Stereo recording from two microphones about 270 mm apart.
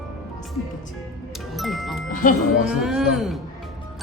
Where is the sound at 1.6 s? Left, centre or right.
Centre.